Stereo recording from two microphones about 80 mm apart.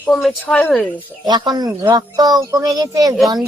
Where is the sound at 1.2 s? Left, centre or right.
Right.